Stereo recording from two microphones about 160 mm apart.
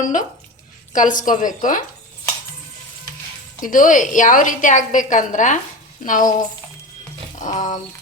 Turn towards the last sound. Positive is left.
turn(degrees=50)  # may be behind; listen again after turning